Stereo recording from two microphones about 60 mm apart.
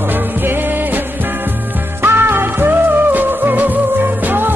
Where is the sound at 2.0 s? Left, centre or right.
Right.